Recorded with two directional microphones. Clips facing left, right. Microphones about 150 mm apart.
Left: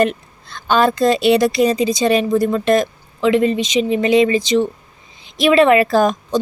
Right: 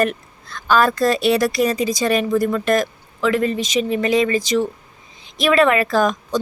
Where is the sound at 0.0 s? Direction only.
25° left (ahead or behind).